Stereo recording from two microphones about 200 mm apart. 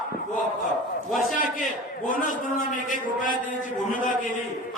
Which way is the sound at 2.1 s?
40° left (ahead or behind).